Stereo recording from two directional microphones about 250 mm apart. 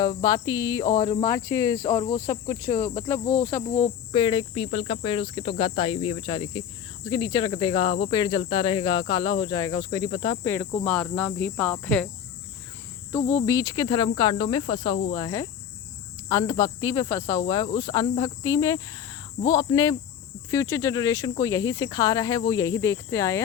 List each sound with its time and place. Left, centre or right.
0.0 s speech: centre
10.8 s cricket: centre
13.3 s speech: centre